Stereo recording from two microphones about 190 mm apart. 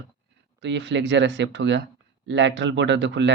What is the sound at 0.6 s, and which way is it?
Speech, 70° right (ahead or behind).